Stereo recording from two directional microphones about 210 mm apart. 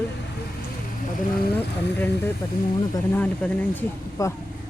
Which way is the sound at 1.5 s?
10° left (ahead or behind).